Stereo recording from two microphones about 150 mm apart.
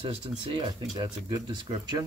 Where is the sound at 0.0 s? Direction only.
35° right (ahead or behind).